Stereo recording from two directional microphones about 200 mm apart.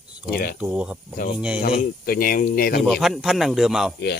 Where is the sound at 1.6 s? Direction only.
45° left (ahead or behind).